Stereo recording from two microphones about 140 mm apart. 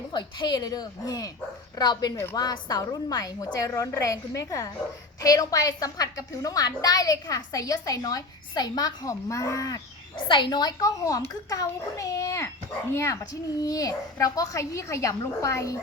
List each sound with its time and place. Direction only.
0.1 s a woman's voice: 35° left (ahead or behind)